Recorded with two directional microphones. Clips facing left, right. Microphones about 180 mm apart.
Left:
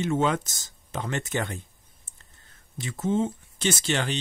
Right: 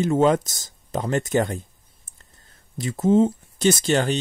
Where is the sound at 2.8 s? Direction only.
35° right (ahead or behind).